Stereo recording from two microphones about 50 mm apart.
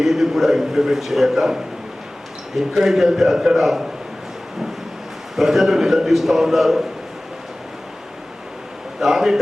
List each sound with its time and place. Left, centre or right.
0.0 s a man's voice: centre
2.6 s a man's voice: centre
5.4 s a man's voice: centre
9.0 s a man's voice: centre